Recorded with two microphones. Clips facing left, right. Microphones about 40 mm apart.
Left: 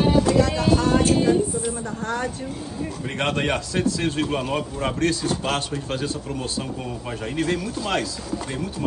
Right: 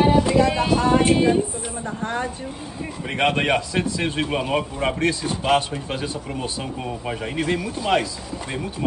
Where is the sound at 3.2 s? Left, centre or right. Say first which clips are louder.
Right 4 dB; right.